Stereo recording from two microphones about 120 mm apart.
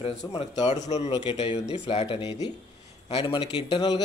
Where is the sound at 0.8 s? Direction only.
65° left (ahead or behind).